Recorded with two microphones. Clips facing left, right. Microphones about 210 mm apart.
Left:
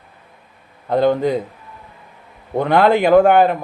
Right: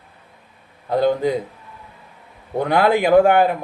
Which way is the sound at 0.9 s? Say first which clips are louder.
Left 2 dB; 60° left (ahead or behind).